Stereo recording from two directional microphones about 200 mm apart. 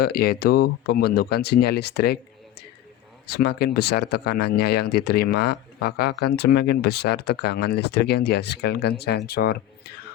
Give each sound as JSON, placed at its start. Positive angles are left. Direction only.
{"t": 0.0, "sound": "speech", "side_deg": 50}
{"t": 3.2, "sound": "speech", "side_deg": 55}